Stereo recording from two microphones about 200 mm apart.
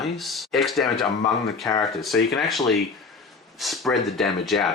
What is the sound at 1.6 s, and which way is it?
Speech, 10° left (ahead or behind).